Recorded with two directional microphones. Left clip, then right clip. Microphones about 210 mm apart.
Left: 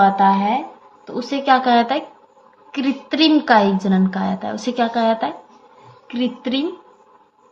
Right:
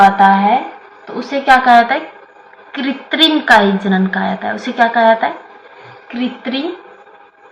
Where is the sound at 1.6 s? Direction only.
35° left (ahead or behind).